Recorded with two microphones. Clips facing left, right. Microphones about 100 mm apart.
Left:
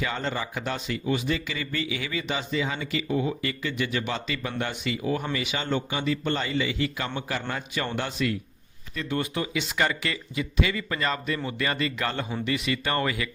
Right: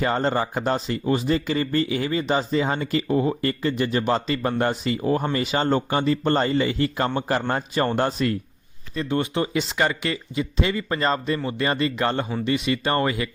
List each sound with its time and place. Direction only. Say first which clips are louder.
0.0 s speech: right 7 dB; 40° right (ahead or behind)
9.0 s speech: right 5 dB; 25° right (ahead or behind)